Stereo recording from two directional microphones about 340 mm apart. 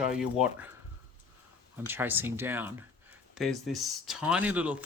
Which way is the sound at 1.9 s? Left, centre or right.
Centre.